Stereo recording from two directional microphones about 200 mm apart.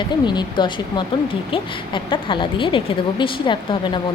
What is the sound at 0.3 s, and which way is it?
A woman's voice, 20° left (ahead or behind).